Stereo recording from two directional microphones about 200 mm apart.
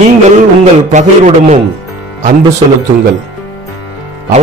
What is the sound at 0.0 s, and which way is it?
A man's voice, 35° right (ahead or behind).